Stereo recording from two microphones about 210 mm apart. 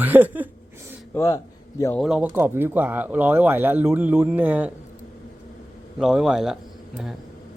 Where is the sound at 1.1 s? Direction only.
15° left (ahead or behind).